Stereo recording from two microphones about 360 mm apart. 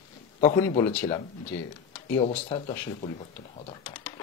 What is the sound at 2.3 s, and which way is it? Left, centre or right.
Speech, centre.